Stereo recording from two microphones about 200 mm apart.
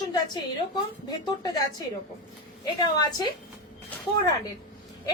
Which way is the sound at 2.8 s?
20° left (ahead or behind).